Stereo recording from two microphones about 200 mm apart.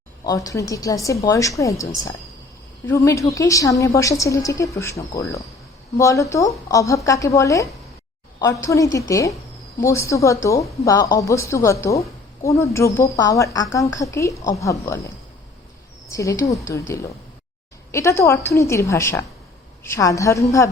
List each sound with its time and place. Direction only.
0.3 s a woman's voice: 15° left (ahead or behind)
2.8 s a woman's voice: 15° left (ahead or behind)